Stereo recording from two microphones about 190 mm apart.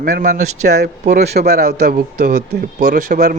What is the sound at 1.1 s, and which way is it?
Speech, 60° right (ahead or behind).